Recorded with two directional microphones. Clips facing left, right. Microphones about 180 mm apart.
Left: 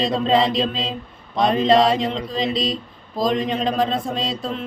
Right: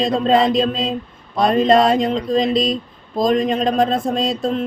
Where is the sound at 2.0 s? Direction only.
45° right (ahead or behind).